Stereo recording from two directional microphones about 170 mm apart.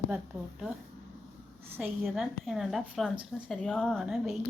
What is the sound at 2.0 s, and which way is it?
A woman's voice, centre (ahead or behind).